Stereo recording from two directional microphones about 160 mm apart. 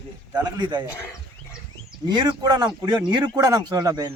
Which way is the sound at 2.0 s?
25° right (ahead or behind).